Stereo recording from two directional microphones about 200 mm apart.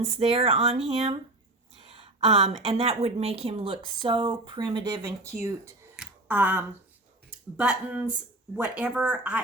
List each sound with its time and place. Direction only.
0.0 s a woman's voice: 30° right (ahead or behind)
6.0 s a sound: 10° right (ahead or behind)
7.5 s speech: 5° right (ahead or behind)